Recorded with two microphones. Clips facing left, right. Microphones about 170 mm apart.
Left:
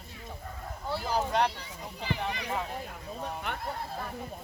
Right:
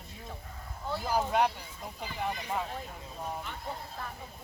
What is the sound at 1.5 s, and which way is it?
Speech, 75° left (ahead or behind).